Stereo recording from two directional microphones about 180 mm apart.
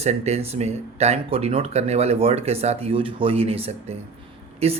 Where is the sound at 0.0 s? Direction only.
35° right (ahead or behind).